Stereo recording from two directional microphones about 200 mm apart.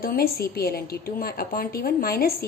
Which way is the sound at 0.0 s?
50° left (ahead or behind).